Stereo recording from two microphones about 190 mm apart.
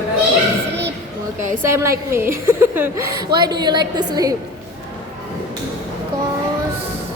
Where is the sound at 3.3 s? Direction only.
20° right (ahead or behind).